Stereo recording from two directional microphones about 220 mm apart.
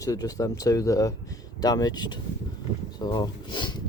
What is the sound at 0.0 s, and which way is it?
Speech, 15° left (ahead or behind).